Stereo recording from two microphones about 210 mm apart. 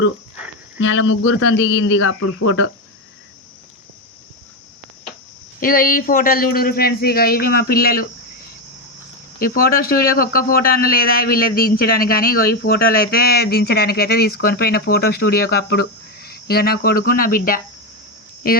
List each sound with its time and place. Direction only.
0.8 s speech: 70° left (ahead or behind)
5.5 s a man's voice: 40° left (ahead or behind)
9.4 s a man's voice: 45° left (ahead or behind)